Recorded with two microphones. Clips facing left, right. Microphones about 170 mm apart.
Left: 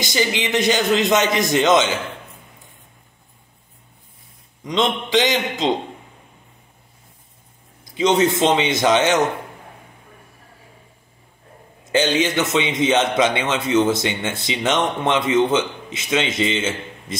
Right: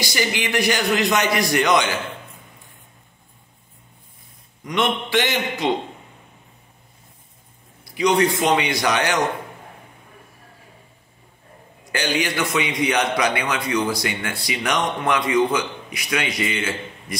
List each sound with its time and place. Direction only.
0.0 s a man's voice: 20° left (ahead or behind)
4.6 s a man's voice: 20° left (ahead or behind)
7.8 s a man's voice: 25° left (ahead or behind)
11.9 s a man's voice: 20° left (ahead or behind)